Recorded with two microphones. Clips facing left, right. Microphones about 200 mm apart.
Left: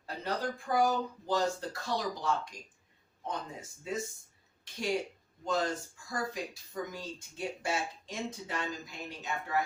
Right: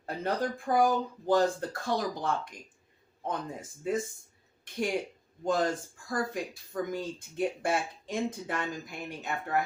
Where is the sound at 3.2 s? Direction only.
55° right (ahead or behind).